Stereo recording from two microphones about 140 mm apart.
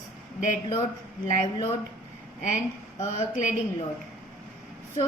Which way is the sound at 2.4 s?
60° left (ahead or behind).